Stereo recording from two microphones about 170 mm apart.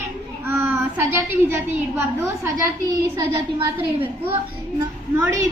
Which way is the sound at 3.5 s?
30° right (ahead or behind).